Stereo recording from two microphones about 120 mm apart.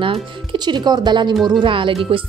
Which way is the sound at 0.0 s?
45° right (ahead or behind).